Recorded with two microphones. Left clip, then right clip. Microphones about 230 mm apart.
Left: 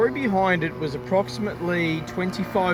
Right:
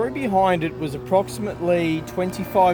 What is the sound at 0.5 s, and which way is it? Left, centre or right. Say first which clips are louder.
Speech: right 1 dB; centre.